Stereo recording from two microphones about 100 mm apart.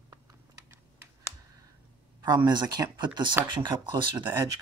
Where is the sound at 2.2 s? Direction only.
50° right (ahead or behind).